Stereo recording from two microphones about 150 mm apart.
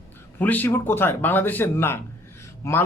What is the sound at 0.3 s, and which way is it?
A man's voice, 10° left (ahead or behind).